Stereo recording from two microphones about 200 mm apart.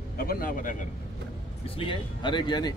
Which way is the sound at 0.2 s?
45° left (ahead or behind).